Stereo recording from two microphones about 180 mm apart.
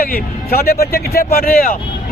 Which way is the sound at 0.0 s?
55° left (ahead or behind).